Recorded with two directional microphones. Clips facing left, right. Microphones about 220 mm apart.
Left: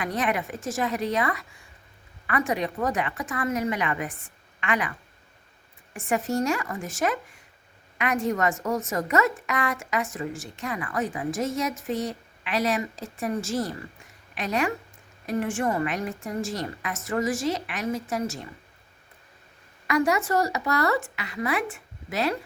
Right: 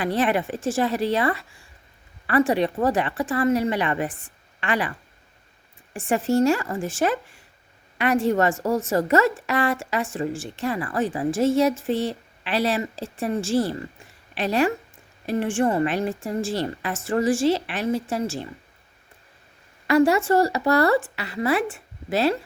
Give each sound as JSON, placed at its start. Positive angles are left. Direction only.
{"t": 0.0, "sound": "speech", "side_deg": -30}
{"t": 6.1, "sound": "speech", "side_deg": -30}
{"t": 19.9, "sound": "speech", "side_deg": -30}